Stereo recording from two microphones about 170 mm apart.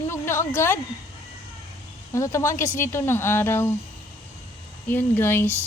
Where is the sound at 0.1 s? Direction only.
15° left (ahead or behind).